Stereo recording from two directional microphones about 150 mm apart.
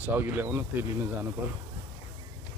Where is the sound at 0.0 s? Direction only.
15° right (ahead or behind).